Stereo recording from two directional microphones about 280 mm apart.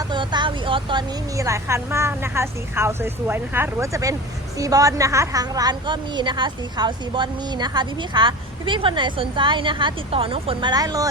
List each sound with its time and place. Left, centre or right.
0.1 s a woman's voice: centre